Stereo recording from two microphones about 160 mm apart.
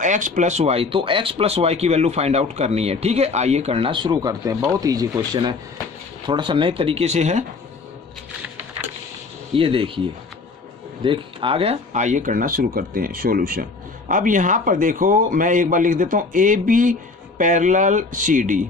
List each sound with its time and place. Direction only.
0.0 s speech: 50° right (ahead or behind)
9.6 s speech: 35° right (ahead or behind)
11.0 s a man's voice: 35° right (ahead or behind); by 13.7 s 65° right (ahead or behind)
14.1 s a man's voice: 55° right (ahead or behind)